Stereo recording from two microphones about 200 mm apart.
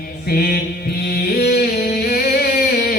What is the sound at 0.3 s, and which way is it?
Mantra, 50° left (ahead or behind).